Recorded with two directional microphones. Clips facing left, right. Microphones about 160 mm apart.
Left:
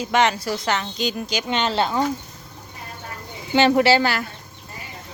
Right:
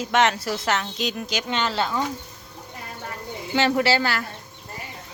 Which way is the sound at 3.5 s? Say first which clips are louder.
Left 5 dB; 20° left (ahead or behind).